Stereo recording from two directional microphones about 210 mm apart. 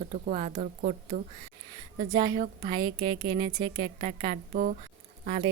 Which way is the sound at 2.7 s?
20° right (ahead or behind).